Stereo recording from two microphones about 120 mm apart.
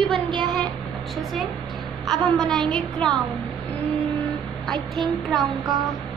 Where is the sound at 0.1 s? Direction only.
40° right (ahead or behind).